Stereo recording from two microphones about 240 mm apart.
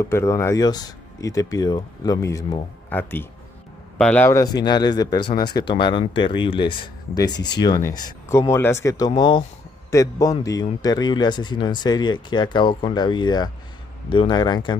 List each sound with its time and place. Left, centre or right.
0.0 s speech: centre